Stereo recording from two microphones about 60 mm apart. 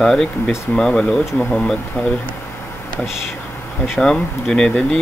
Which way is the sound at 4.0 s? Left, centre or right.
Centre.